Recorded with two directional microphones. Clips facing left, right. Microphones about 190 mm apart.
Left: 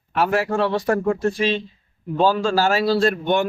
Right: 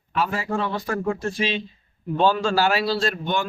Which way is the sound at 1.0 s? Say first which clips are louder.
Left 5 dB; 45° left (ahead or behind).